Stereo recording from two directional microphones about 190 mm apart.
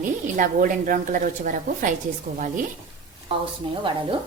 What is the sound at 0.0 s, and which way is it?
A woman's voice, 45° right (ahead or behind).